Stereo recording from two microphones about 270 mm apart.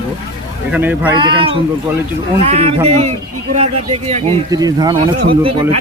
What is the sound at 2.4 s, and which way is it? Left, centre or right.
Speech, right.